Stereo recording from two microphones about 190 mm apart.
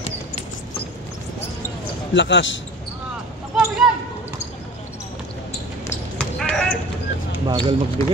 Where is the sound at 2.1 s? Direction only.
70° left (ahead or behind).